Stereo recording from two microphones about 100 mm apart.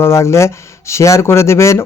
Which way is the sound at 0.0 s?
30° left (ahead or behind).